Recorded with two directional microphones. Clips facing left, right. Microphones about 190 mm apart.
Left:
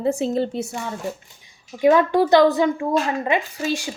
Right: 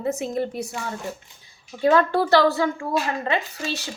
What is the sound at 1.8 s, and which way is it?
Speech, 15° left (ahead or behind).